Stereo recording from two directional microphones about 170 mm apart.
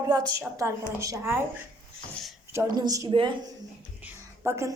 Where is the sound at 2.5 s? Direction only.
20° right (ahead or behind).